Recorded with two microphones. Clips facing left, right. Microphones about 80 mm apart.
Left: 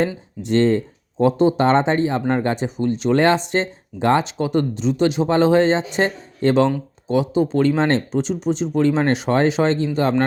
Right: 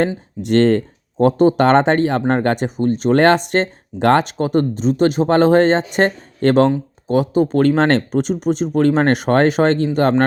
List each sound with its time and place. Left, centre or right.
0.4 s speech: right
1.6 s speech: right
7.8 s speech: right